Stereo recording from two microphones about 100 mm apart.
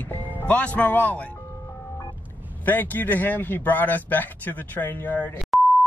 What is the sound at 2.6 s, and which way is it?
Speech, 20° left (ahead or behind).